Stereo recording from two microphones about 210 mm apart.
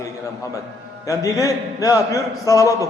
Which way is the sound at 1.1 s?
15° left (ahead or behind).